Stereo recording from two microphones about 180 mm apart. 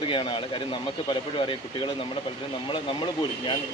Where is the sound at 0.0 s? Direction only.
25° left (ahead or behind).